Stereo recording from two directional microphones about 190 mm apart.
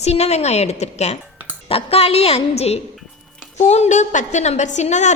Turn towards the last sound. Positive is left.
turn(degrees=40)  # may be behind; listen again after turning